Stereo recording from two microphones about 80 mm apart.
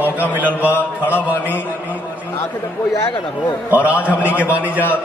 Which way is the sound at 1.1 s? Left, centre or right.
Right.